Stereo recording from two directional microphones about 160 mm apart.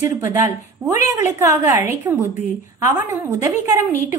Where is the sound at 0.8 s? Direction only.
20° right (ahead or behind).